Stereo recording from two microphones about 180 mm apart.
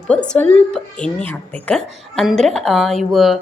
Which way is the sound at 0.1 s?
5° left (ahead or behind).